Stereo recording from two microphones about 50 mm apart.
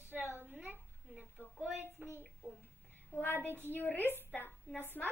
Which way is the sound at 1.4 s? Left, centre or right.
Left.